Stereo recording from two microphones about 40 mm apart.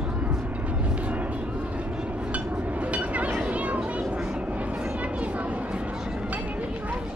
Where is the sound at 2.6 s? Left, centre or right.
Right.